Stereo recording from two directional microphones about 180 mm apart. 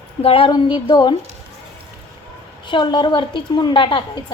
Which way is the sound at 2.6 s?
25° left (ahead or behind).